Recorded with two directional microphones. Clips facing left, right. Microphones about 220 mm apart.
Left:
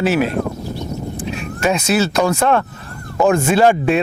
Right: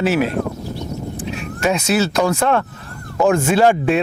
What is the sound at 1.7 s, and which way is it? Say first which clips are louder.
Speech: left 1 dB; 10° left (ahead or behind).